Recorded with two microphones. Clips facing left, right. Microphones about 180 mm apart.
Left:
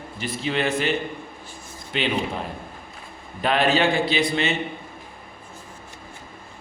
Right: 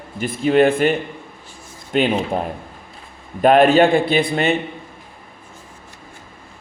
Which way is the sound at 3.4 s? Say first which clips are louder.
Right 9 dB; 50° right (ahead or behind).